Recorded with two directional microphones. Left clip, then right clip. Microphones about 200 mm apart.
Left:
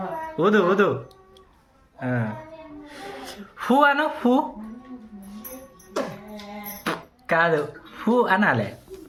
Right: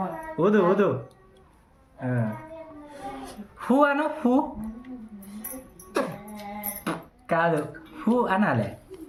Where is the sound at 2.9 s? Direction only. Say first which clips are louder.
Left 1 dB; centre (ahead or behind).